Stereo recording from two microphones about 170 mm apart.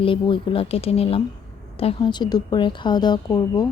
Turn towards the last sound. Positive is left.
turn(degrees=25)  # may be behind; listen again after turning